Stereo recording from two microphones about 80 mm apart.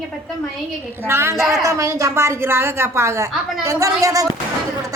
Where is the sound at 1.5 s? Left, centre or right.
Right.